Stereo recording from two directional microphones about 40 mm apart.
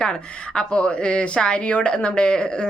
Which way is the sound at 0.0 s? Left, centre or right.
Left.